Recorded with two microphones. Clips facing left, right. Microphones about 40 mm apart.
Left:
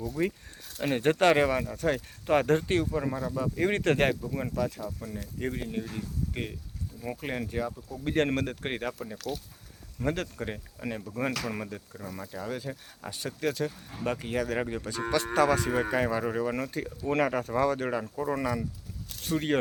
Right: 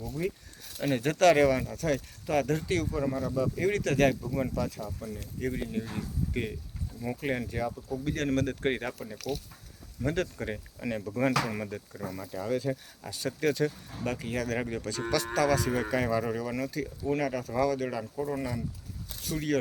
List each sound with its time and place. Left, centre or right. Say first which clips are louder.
0.2 s speech: left 3 dB; left
0.8 s speech: left 1 dB; left
3.6 s speech: left 1 dB; left
4.2 s speech: even; centre
5.1 s speech: right 1 dB; left
5.8 s speech: even; centre
6.3 s speech: right 2 dB; centre
8.0 s speech: left 4 dB; left
8.4 s speech: right 3 dB; centre
10.2 s speech: right 2 dB; centre
13.9 s speech: left 2 dB; centre
17.1 s speech: left 4 dB; left
18.3 s speech: left 3 dB; left